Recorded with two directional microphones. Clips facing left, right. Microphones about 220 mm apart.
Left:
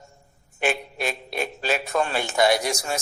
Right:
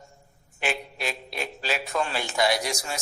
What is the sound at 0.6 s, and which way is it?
A man's voice, 50° left (ahead or behind).